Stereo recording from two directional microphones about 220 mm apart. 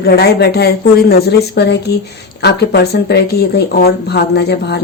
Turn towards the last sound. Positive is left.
turn(degrees=50)  # may be behind; listen again after turning